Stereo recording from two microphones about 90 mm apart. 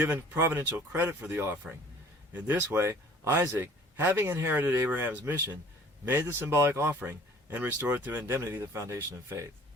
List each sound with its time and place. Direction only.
0.0 s speech: 25° right (ahead or behind)
2.6 s speech: 30° right (ahead or behind)